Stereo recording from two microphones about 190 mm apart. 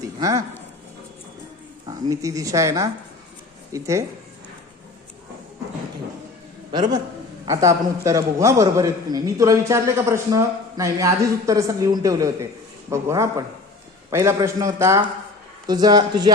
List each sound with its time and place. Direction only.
0.2 s speech: 20° right (ahead or behind)
1.9 s a man's voice: 20° right (ahead or behind)
7.4 s a man's voice: 15° right (ahead or behind)